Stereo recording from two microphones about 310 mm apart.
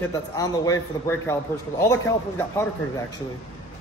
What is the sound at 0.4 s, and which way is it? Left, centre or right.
A man's voice, centre.